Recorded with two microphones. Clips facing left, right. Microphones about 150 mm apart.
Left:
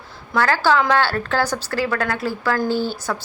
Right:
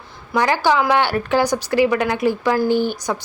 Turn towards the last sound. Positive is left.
turn(degrees=-15)  # may be behind; listen again after turning